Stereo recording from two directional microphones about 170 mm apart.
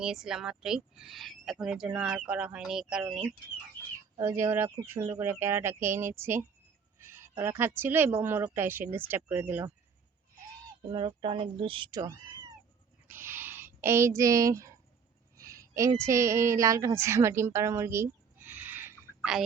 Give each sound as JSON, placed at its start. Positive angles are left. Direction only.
{"t": 0.0, "sound": "speech", "side_deg": -5}
{"t": 4.2, "sound": "speech", "side_deg": -15}
{"t": 10.9, "sound": "speech", "side_deg": -30}
{"t": 13.1, "sound": "a sound", "side_deg": -15}
{"t": 16.0, "sound": "a woman's voice", "side_deg": -15}
{"t": 19.2, "sound": "speech", "side_deg": -5}